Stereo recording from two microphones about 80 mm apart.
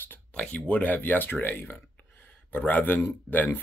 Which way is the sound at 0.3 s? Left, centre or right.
Centre.